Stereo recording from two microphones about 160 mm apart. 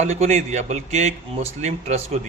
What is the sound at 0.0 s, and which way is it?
Speech, 45° right (ahead or behind).